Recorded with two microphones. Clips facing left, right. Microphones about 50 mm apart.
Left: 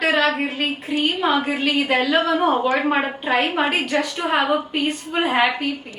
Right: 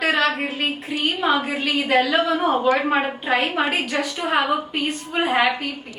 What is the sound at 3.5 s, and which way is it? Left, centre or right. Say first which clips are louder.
Speech: left 1 dB; left.